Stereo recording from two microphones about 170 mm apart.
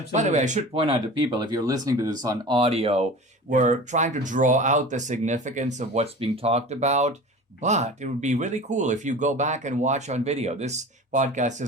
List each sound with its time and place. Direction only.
0.1 s speech: 45° right (ahead or behind)
0.8 s speech: 30° right (ahead or behind)